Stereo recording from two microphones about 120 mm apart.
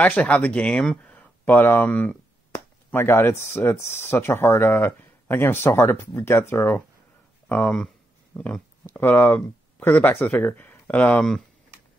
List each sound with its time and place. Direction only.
0.0 s speech: 10° left (ahead or behind)